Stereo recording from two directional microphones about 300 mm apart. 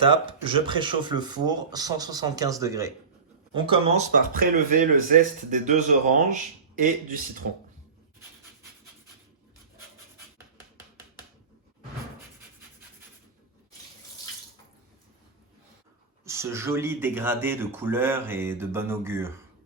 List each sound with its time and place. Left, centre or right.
0.0 s speech: centre
7.4 s speech: right
16.2 s speech: centre